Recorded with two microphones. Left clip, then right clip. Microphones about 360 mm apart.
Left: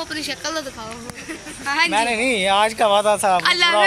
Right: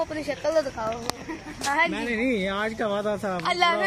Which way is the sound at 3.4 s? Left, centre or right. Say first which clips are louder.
Left 6 dB; centre.